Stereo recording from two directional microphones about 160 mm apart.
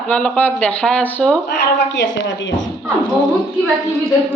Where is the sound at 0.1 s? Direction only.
10° left (ahead or behind).